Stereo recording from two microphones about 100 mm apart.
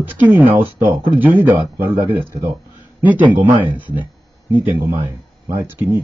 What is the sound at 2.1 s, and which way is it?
Speech, 60° right (ahead or behind).